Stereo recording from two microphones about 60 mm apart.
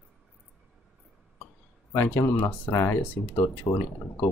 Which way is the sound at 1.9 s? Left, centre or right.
Left.